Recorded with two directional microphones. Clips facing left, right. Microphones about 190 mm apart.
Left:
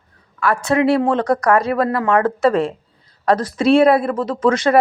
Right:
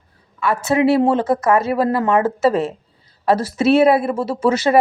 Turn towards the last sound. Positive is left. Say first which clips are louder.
# left 1 dB
turn(degrees=-5)  # may be behind; listen again after turning